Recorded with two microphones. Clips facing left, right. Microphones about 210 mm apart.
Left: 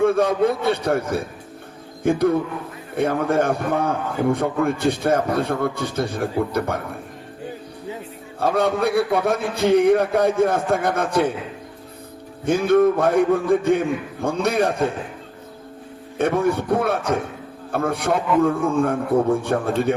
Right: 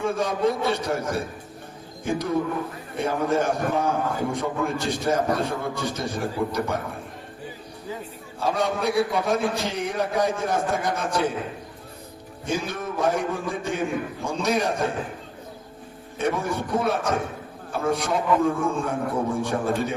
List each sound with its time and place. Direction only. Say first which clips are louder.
0.0 s a man's voice: left 6 dB; 60° left (ahead or behind)
8.4 s a man's voice: left 5 dB; 60° left (ahead or behind)
12.5 s a man's voice: left 13 dB; 55° left (ahead or behind)
16.1 s a man's voice: left 6 dB; 55° left (ahead or behind)